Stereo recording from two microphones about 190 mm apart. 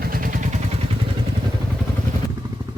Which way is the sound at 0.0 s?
50° right (ahead or behind).